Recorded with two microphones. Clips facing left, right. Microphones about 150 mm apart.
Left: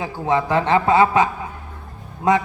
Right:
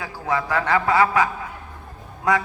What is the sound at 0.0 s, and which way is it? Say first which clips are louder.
A man's voice: left 4 dB; 25° left (ahead or behind).